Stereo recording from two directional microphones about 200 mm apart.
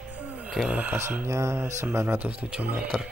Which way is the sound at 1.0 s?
15° right (ahead or behind).